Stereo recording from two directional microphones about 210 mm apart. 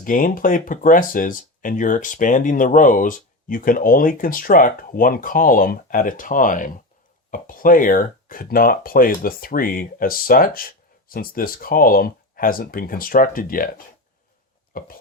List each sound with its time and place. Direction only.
0.0 s speech: 40° left (ahead or behind)